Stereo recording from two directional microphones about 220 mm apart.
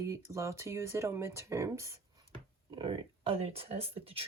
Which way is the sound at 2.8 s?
25° right (ahead or behind).